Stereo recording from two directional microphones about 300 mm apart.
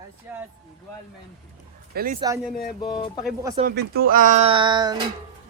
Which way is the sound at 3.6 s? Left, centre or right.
Right.